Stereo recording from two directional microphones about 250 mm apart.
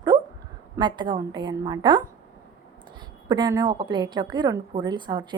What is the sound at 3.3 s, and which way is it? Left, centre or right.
A woman's voice, centre.